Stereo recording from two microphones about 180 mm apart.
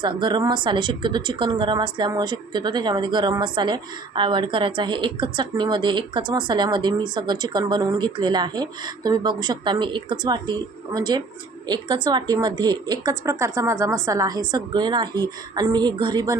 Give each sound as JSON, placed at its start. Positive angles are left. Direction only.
{"t": 0.0, "sound": "speech", "side_deg": -25}